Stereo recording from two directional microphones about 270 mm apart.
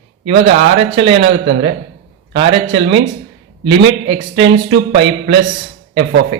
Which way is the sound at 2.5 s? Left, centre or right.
Right.